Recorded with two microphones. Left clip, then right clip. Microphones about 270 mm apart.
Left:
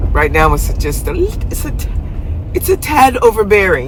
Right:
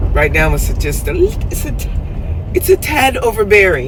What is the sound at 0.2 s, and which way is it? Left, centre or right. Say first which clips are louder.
Speech: left 2 dB; centre.